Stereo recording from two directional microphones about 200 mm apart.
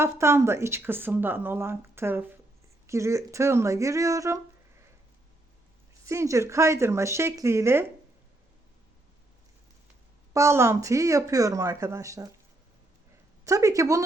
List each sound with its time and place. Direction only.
0.0 s speech: 15° right (ahead or behind)
6.1 s speech: 15° right (ahead or behind)
10.3 s speech: 15° right (ahead or behind)
13.4 s speech: 15° right (ahead or behind)